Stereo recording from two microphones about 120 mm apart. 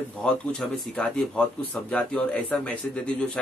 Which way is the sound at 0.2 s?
10° left (ahead or behind).